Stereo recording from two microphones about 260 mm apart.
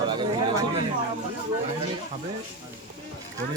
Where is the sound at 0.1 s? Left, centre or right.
Centre.